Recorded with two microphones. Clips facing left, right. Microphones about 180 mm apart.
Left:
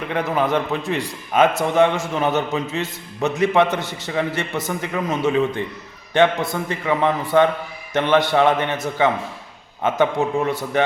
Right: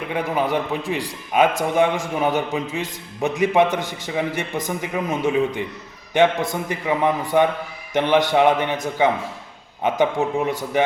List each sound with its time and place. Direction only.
0.1 s a man's voice: 10° right (ahead or behind)